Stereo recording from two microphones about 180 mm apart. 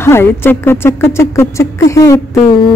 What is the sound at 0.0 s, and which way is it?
Speech, 15° left (ahead or behind).